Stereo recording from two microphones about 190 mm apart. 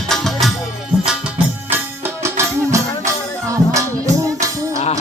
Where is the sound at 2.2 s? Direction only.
15° right (ahead or behind).